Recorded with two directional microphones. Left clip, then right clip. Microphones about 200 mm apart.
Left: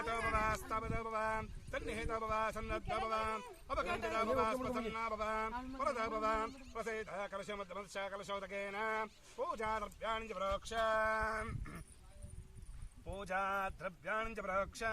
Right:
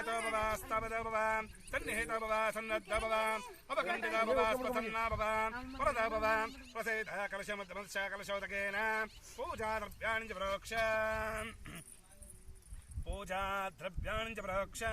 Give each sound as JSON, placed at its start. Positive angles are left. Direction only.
{"t": 0.0, "sound": "speech", "side_deg": 0}
{"t": 13.1, "sound": "speech", "side_deg": -15}